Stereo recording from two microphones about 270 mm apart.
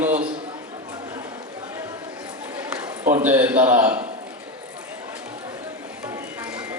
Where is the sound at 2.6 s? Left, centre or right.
Centre.